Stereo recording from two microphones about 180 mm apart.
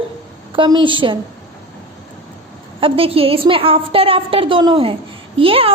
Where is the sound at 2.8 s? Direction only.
30° right (ahead or behind).